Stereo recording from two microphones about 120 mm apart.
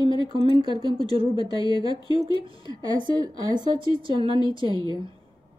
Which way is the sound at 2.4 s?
45° right (ahead or behind).